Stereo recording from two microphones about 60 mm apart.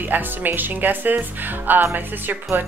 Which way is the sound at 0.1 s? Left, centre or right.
Right.